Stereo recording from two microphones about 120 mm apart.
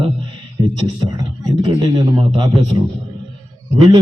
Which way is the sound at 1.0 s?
35° right (ahead or behind).